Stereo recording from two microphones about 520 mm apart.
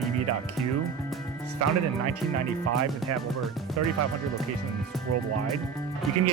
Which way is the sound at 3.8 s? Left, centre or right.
Right.